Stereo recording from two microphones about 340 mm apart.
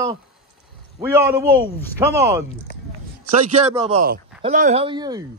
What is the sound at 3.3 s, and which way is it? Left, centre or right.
A man's voice, right.